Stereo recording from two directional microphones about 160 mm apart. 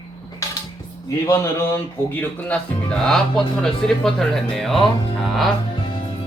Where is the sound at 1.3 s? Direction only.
20° left (ahead or behind).